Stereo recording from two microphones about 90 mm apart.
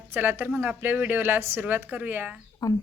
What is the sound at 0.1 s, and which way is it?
Speech, 25° right (ahead or behind).